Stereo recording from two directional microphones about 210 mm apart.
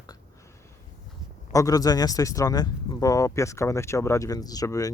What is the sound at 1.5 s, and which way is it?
Speech, 15° left (ahead or behind).